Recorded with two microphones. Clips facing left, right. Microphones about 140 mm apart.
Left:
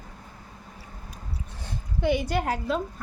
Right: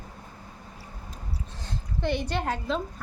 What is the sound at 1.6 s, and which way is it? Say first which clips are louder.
A woman's voice: left 4 dB; 10° left (ahead or behind).